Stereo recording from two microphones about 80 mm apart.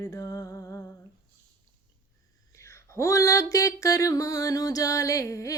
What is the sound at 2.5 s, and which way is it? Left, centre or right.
Speech, left.